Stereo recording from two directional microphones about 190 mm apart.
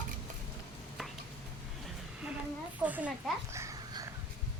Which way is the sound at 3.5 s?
15° right (ahead or behind).